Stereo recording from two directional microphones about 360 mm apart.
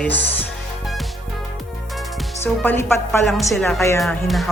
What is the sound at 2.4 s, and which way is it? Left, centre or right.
A woman's voice, centre.